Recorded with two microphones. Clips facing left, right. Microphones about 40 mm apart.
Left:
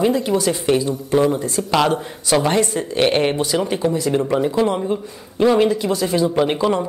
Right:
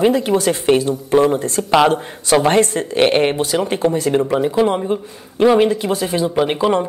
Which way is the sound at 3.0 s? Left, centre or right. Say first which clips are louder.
Right 3 dB; centre.